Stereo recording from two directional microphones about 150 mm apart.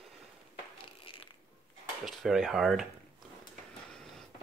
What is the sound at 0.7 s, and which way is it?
Crushing, 35° left (ahead or behind).